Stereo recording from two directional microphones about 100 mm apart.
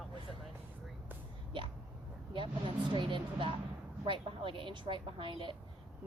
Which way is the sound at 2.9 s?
55° right (ahead or behind).